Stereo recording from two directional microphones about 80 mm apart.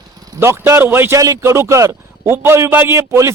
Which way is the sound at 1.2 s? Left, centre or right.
Right.